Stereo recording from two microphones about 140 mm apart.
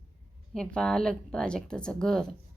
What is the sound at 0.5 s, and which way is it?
A woman's voice, 5° left (ahead or behind).